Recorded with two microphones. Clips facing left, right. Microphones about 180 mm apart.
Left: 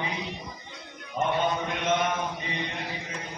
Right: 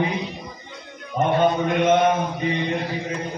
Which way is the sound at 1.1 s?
60° right (ahead or behind).